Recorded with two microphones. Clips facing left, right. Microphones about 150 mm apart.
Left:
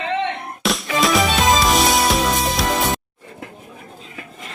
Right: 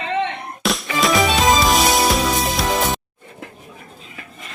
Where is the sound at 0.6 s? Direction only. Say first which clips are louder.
Even; centre (ahead or behind).